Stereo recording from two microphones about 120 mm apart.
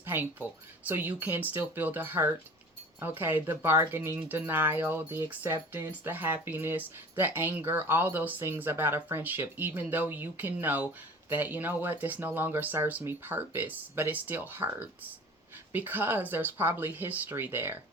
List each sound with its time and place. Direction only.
0.0 s speech: 20° right (ahead or behind)